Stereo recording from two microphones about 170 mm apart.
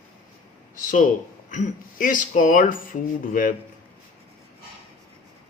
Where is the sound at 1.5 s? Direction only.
45° left (ahead or behind).